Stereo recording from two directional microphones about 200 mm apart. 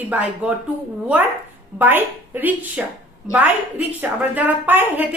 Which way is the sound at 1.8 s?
10° right (ahead or behind).